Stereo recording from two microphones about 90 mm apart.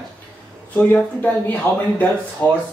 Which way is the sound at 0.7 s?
20° left (ahead or behind).